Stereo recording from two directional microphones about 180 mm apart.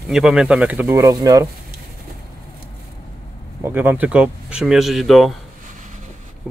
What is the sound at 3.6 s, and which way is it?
Speech, 10° right (ahead or behind).